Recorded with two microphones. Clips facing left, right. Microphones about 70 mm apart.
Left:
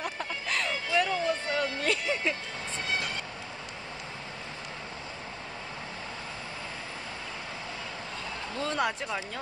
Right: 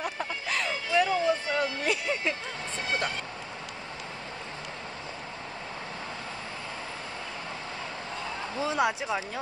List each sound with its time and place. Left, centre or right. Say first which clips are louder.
0.0 s music: right 2 dB; centre
8.5 s speech: right 3 dB; centre